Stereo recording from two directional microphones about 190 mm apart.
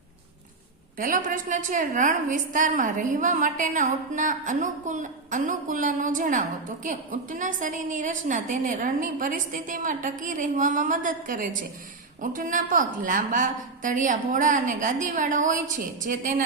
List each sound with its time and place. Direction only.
0.9 s a woman's voice: 45° right (ahead or behind)